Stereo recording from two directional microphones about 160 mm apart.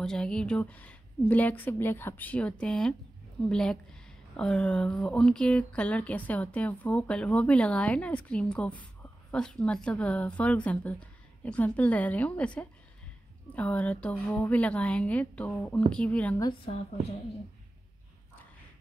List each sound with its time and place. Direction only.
0.0 s a woman's voice: 5° left (ahead or behind)
13.6 s speech: 10° left (ahead or behind)
16.3 s a woman's voice: 25° left (ahead or behind)